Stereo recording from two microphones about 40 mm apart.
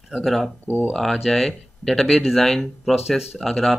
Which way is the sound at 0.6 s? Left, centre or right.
Left.